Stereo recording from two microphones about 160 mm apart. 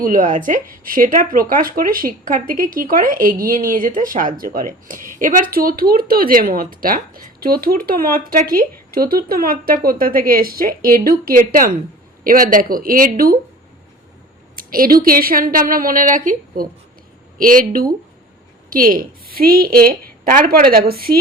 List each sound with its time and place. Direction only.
0.0 s speech: 60° right (ahead or behind)
14.5 s a woman's voice: 65° right (ahead or behind)